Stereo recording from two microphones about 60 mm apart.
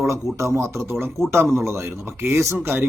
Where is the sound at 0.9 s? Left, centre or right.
Right.